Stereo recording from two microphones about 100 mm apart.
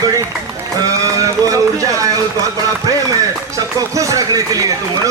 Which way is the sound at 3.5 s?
35° right (ahead or behind).